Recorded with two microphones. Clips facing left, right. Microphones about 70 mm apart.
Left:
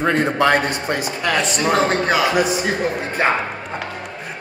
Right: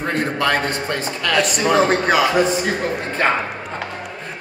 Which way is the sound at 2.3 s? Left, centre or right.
Centre.